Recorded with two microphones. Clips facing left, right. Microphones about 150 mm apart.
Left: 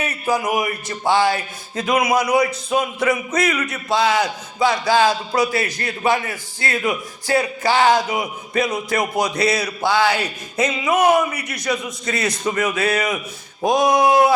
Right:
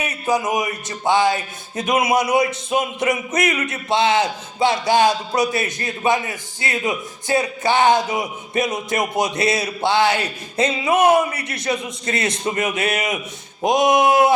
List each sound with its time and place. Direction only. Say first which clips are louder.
0.0 s speech: even; 20° right (ahead or behind)